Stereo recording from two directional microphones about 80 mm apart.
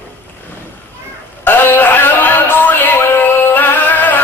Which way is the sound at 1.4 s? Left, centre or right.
Left.